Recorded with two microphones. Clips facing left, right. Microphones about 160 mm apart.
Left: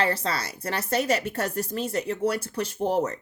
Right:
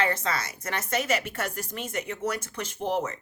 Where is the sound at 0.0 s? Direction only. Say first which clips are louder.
Left 1 dB; 35° left (ahead or behind).